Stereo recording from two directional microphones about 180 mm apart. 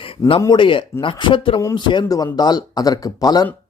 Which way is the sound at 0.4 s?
25° left (ahead or behind).